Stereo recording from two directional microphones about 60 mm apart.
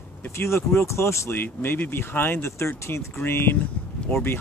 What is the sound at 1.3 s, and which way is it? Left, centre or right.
Speech, left.